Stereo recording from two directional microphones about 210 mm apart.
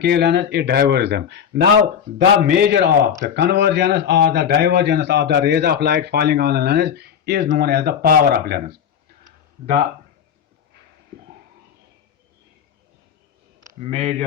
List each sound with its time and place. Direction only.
0.0 s a man's voice: 50° right (ahead or behind)
13.9 s speech: 30° right (ahead or behind)